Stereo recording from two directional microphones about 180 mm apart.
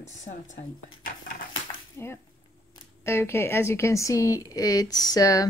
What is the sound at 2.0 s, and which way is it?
Speech, 15° left (ahead or behind).